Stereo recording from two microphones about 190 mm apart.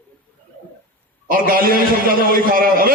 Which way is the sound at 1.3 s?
50° right (ahead or behind).